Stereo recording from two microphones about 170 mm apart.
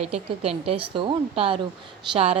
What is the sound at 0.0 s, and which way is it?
A woman's voice, 35° right (ahead or behind).